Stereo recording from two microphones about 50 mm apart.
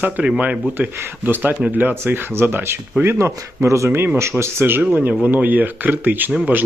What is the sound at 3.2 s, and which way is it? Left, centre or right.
Speech, right.